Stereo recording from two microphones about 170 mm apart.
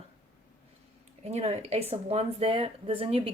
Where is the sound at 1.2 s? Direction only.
40° right (ahead or behind).